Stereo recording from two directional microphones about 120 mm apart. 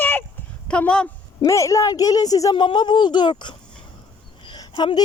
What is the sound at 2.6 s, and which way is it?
Speech, 40° left (ahead or behind).